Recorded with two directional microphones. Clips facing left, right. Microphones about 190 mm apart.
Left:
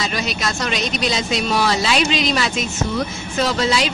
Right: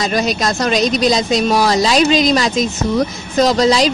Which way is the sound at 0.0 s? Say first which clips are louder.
Right 7 dB; 40° right (ahead or behind).